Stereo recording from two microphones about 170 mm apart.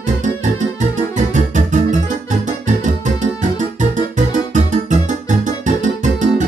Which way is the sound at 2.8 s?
50° right (ahead or behind).